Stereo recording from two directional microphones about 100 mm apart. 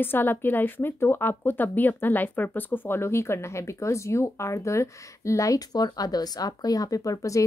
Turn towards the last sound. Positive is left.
turn(degrees=35)  # may be behind; listen again after turning